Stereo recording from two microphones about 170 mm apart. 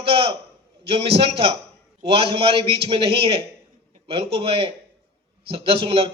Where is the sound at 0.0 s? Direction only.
30° right (ahead or behind).